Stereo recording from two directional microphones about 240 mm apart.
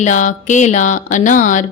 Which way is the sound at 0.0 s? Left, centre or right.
Left.